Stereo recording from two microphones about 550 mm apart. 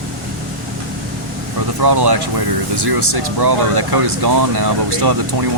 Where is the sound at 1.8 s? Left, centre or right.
Right.